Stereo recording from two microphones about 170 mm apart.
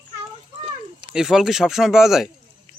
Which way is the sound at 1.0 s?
5° right (ahead or behind).